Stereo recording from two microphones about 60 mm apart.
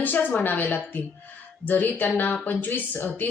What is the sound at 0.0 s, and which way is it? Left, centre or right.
Speech, left.